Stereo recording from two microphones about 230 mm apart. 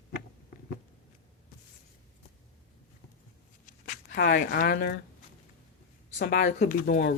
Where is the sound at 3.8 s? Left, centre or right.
Left.